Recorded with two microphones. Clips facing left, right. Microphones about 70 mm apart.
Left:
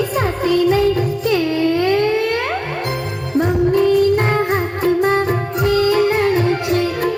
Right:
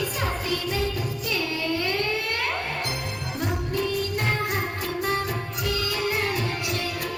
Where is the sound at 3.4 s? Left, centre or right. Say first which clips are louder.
Left 14 dB; left.